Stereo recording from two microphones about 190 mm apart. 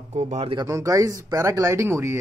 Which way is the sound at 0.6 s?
15° right (ahead or behind).